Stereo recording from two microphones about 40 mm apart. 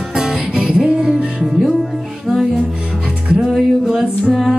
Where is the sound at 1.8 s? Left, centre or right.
Centre.